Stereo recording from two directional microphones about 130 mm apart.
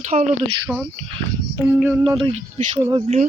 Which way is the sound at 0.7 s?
10° right (ahead or behind).